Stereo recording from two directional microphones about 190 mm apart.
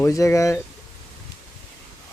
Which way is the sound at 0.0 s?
15° left (ahead or behind).